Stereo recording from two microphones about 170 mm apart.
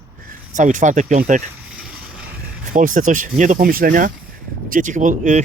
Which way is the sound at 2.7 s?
50° right (ahead or behind).